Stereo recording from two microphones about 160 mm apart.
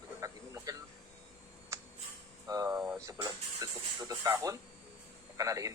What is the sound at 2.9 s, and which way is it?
Music, 20° right (ahead or behind).